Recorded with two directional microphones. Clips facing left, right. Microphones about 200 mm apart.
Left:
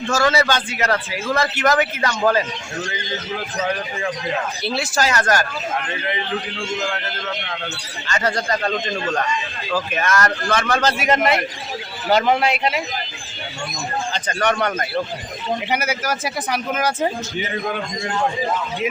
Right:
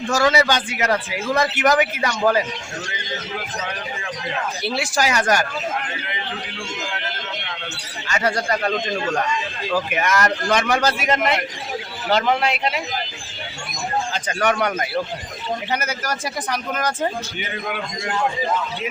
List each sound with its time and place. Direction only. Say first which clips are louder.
0.1 s a man's voice: even; 15° right (ahead or behind)
4.6 s a man's voice: right 1 dB; 15° right (ahead or behind)
8.0 s a man's voice: even; 10° right (ahead or behind)
11.0 s a man's voice: left 2 dB; 5° left (ahead or behind)
14.1 s a man's voice: left 2 dB; 5° right (ahead or behind)
15.7 s speech: left 3 dB; 10° left (ahead or behind)